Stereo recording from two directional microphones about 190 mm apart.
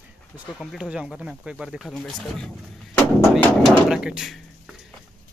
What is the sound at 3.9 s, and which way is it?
Speech, 5° right (ahead or behind).